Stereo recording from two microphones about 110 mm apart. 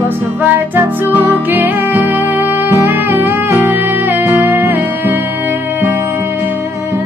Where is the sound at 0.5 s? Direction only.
15° right (ahead or behind).